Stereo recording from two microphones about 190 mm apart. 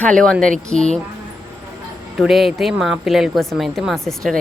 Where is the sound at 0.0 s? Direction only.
5° left (ahead or behind).